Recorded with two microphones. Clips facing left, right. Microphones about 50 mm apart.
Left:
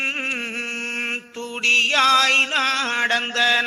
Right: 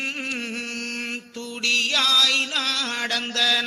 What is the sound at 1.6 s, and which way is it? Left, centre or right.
Music, left.